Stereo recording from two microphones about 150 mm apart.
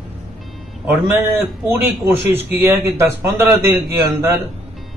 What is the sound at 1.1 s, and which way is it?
A man's voice, 15° right (ahead or behind).